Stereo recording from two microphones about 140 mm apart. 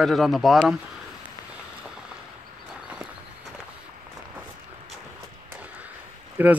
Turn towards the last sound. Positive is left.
turn(degrees=-10)  # may be behind; listen again after turning